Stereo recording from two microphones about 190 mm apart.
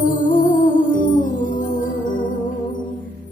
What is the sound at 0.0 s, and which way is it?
Music, 45° left (ahead or behind).